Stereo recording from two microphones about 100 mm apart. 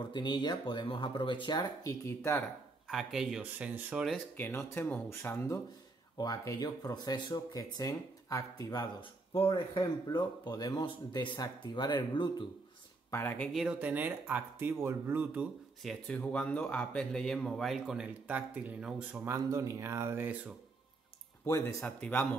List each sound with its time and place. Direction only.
0.1 s speech: 50° left (ahead or behind)
1.8 s speech: 30° left (ahead or behind)
2.9 s a man's voice: 5° right (ahead or behind)
4.4 s speech: 25° left (ahead or behind)
6.1 s speech: 40° left (ahead or behind)
9.5 s speech: 50° left (ahead or behind)
13.1 s speech: 20° left (ahead or behind)
13.5 s a man's voice: 5° right (ahead or behind)
13.7 s speech: 15° right (ahead or behind)
15.8 s a man's voice: 10° left (ahead or behind); by 19.2 s 10° right (ahead or behind)
19.2 s speech: 30° right (ahead or behind)
21.5 s speech: 30° left (ahead or behind)
21.8 s a man's voice: 15° left (ahead or behind)